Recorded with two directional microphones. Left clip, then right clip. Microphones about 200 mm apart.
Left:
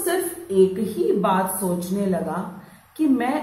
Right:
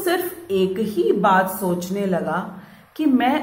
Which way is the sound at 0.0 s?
40° right (ahead or behind).